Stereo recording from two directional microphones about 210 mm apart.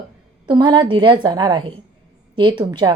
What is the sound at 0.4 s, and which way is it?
A woman's voice, 20° right (ahead or behind).